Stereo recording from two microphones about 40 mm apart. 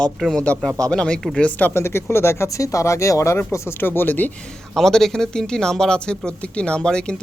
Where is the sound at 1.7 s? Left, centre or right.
Left.